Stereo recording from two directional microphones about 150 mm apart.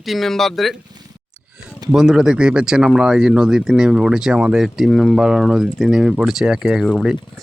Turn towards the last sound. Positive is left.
turn(degrees=0)  # may be behind; listen again after turning